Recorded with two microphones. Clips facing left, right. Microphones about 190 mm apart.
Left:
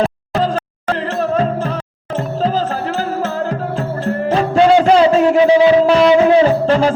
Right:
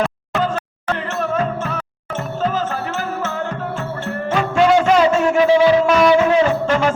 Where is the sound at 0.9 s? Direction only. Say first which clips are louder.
Left 4 dB; 35° left (ahead or behind).